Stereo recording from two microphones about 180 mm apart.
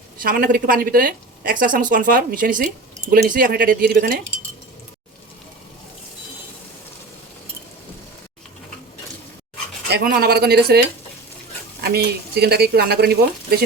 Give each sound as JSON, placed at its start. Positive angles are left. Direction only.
{"t": 0.2, "sound": "a woman's voice", "side_deg": -55}
{"t": 9.9, "sound": "speech", "side_deg": -55}